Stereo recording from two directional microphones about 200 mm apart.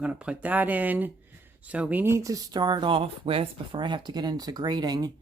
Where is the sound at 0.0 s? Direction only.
5° right (ahead or behind).